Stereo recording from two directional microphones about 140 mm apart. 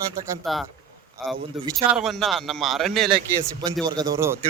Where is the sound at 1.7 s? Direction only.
Centre (ahead or behind).